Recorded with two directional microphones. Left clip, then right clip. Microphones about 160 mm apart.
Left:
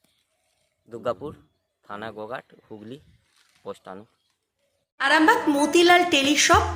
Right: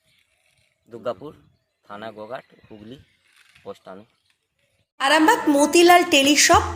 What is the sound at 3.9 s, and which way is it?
Speech, 35° left (ahead or behind).